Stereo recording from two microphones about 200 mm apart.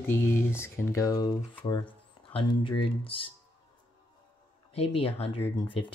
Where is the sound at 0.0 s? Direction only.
10° left (ahead or behind).